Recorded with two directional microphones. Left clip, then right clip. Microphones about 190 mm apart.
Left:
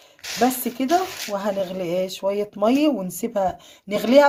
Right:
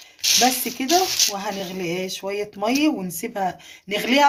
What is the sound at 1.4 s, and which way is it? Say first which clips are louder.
Speech: left 3 dB; 60° left (ahead or behind).